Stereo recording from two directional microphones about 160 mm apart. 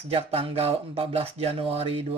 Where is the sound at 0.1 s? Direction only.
40° right (ahead or behind).